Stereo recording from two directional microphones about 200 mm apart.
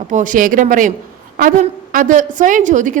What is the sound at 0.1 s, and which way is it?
A woman's voice, 40° right (ahead or behind).